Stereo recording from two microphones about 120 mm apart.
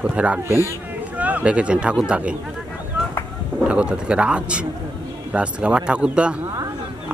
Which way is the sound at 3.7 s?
10° right (ahead or behind).